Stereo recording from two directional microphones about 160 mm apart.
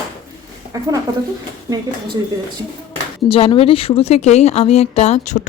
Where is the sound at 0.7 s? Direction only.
20° right (ahead or behind).